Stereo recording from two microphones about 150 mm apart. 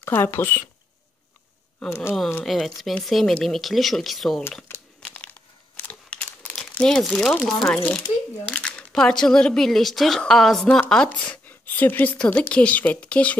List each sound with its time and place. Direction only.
0.0 s speech: 15° left (ahead or behind)
1.9 s speech: 20° left (ahead or behind)
2.4 s speech: centre (ahead or behind)
4.7 s crumpling: 15° left (ahead or behind)
8.5 s speech: 5° left (ahead or behind)